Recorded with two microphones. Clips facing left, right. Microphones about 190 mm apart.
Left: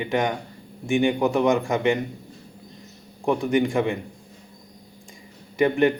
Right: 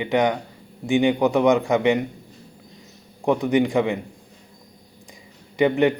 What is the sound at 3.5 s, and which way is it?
Speech, 20° right (ahead or behind).